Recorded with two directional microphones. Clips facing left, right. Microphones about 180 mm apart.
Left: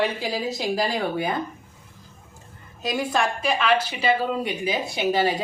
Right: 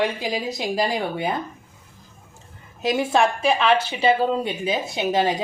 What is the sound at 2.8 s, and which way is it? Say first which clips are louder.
Speech: right 4 dB; 25° right (ahead or behind).